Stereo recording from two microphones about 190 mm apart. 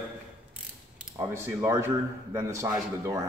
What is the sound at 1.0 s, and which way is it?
A man's voice, 15° right (ahead or behind).